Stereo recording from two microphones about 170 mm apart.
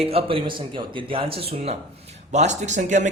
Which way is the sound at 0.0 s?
35° right (ahead or behind).